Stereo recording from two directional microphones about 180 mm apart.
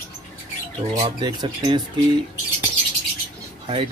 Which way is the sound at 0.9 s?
25° right (ahead or behind).